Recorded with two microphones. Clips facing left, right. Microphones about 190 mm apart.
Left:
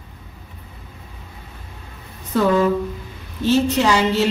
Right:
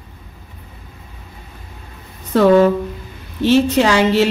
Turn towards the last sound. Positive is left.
turn(degrees=-80)